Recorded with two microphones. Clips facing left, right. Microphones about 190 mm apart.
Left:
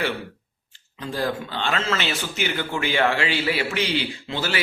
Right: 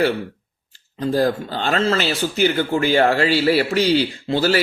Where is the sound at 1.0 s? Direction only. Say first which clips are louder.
Right 8 dB; 40° right (ahead or behind).